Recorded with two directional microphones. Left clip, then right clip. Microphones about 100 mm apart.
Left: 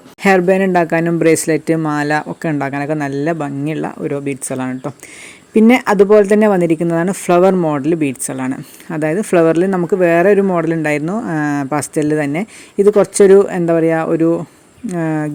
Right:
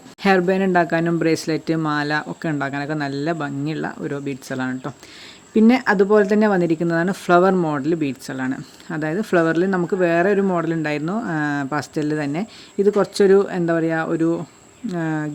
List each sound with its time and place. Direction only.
0.2 s speech: 35° left (ahead or behind)
3.3 s speech: 25° left (ahead or behind)
5.5 s speech: 45° left (ahead or behind); by 7.8 s 20° left (ahead or behind)
7.8 s speech: 35° left (ahead or behind)